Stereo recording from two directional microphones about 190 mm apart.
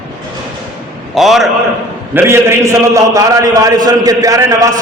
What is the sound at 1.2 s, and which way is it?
Speech, centre (ahead or behind).